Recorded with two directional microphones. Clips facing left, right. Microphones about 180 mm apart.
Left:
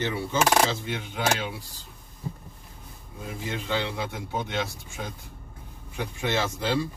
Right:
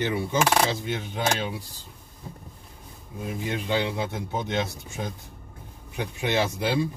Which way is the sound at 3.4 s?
15° right (ahead or behind).